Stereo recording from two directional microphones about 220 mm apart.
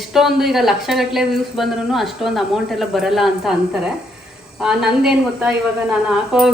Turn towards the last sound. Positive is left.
turn(degrees=-5)  # may be behind; listen again after turning